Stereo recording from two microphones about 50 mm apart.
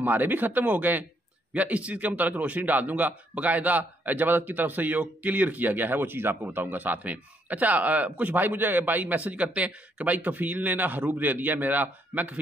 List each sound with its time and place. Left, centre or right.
0.0 s a man's voice: right